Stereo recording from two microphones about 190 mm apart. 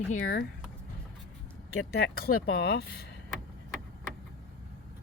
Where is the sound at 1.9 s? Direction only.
60° left (ahead or behind).